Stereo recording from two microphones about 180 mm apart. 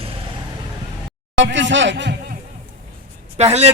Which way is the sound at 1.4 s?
90° right.